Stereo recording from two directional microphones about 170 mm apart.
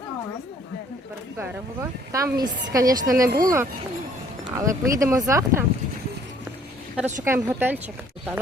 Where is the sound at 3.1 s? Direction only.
55° right (ahead or behind).